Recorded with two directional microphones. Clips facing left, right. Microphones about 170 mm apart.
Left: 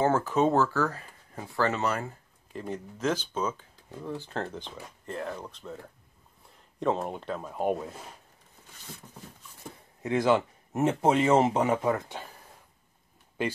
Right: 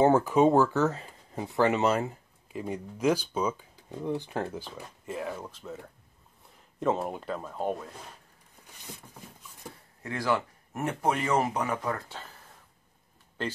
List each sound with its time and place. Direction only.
0.0 s speech: 15° right (ahead or behind)
2.5 s speech: 10° right (ahead or behind)
7.4 s speech: 10° left (ahead or behind)
10.0 s speech: 20° left (ahead or behind)
13.4 s speech: 10° left (ahead or behind)